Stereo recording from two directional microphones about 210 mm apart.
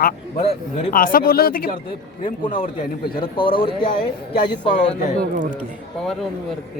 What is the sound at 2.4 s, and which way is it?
Speech, 25° left (ahead or behind).